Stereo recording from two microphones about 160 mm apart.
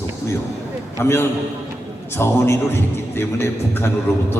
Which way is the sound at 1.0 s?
15° left (ahead or behind).